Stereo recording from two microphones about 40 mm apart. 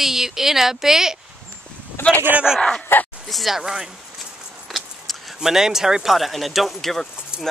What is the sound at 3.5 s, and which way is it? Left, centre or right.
Speech, centre.